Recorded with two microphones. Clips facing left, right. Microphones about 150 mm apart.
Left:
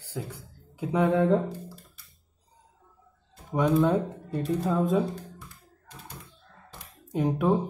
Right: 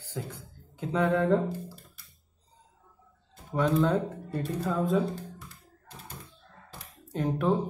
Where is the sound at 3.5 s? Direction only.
15° left (ahead or behind).